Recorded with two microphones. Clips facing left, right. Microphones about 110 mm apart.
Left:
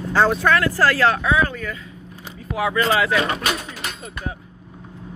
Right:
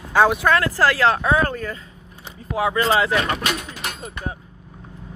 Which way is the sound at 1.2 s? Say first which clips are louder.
Right 1 dB; 40° right (ahead or behind).